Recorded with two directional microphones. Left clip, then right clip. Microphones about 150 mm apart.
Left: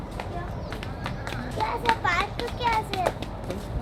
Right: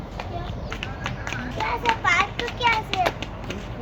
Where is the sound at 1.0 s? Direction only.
20° right (ahead or behind).